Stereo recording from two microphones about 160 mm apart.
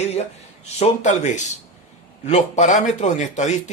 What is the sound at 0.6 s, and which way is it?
Speech, 45° left (ahead or behind).